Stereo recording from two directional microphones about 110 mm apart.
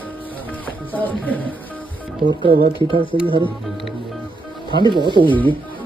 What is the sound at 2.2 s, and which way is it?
Speech, 45° right (ahead or behind).